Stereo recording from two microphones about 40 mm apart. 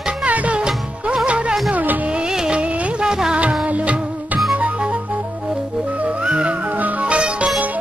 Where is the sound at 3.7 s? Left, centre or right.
Right.